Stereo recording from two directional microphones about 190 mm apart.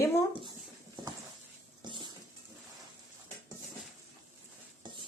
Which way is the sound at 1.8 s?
25° right (ahead or behind).